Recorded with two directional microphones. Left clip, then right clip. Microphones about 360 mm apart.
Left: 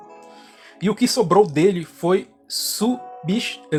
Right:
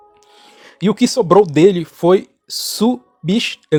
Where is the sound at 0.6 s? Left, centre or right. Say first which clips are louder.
Right 5 dB; right.